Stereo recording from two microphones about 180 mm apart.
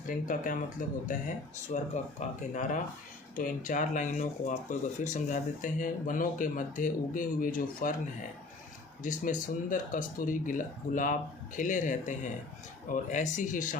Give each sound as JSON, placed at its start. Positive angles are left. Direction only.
{"t": 0.1, "sound": "speech", "side_deg": 50}
{"t": 9.0, "sound": "speech", "side_deg": 45}